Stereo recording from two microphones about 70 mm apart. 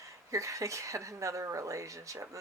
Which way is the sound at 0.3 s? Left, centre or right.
Right.